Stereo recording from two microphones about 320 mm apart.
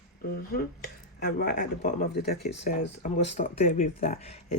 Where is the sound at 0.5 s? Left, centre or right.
Left.